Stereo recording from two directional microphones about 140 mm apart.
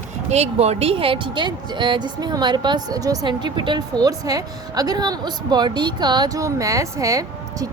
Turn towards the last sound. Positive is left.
turn(degrees=-25)  # may be behind; listen again after turning